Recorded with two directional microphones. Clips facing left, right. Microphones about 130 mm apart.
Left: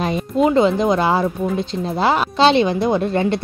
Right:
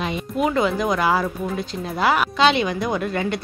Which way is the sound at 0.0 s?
40° left (ahead or behind).